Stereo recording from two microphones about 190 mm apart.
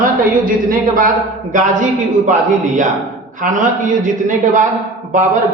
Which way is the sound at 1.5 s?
45° right (ahead or behind).